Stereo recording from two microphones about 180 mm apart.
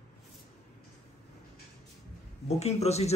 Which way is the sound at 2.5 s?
35° left (ahead or behind).